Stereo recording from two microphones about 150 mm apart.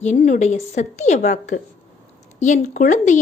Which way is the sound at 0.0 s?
50° left (ahead or behind).